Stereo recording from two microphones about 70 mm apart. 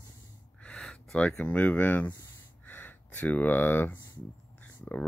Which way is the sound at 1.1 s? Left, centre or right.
Centre.